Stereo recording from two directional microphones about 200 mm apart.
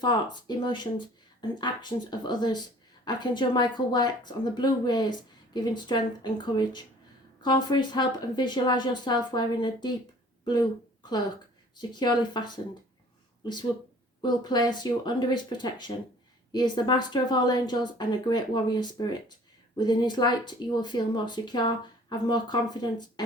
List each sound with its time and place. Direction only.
0.0 s speech: 20° left (ahead or behind)
11.8 s speech: 20° left (ahead or behind)